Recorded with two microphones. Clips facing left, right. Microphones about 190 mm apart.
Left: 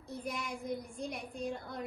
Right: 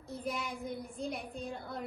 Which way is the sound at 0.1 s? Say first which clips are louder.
Right 1 dB; centre (ahead or behind).